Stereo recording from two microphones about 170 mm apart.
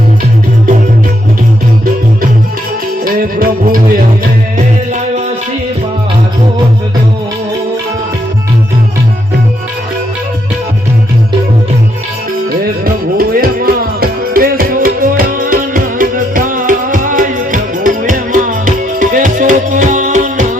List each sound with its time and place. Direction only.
3.0 s music: 55° right (ahead or behind)
12.5 s music: 60° right (ahead or behind)